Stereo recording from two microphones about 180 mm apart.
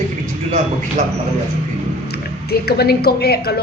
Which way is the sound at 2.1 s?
60° left (ahead or behind).